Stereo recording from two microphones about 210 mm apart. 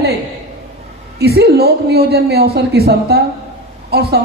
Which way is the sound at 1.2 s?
50° right (ahead or behind).